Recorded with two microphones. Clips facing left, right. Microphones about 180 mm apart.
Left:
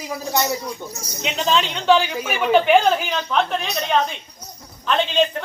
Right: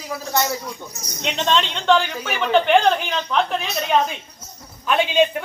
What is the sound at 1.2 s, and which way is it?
A man's voice, 5° left (ahead or behind).